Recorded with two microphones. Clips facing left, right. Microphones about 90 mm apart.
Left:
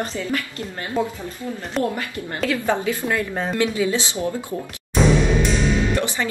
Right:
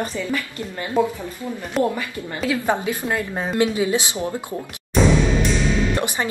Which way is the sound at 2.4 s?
15° right (ahead or behind).